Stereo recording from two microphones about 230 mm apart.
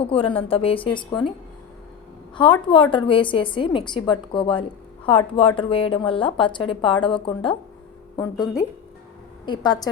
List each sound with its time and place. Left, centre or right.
0.0 s a woman's voice: left
2.3 s a woman's voice: left